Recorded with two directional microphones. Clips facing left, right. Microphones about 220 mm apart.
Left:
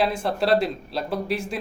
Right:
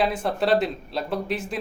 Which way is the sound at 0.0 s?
5° left (ahead or behind).